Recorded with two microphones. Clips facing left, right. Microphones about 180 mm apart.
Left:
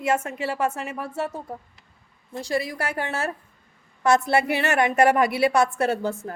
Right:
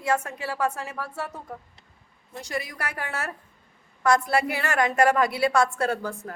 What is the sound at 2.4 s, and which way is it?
A woman's voice, 30° left (ahead or behind).